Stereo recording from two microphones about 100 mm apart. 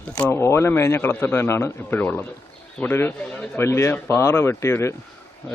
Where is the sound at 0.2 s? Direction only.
20° left (ahead or behind).